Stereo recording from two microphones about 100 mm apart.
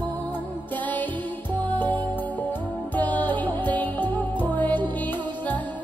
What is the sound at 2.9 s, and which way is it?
Music, 15° left (ahead or behind).